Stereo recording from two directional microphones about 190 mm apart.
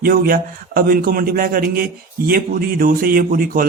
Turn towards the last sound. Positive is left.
turn(degrees=-45)  # may be behind; listen again after turning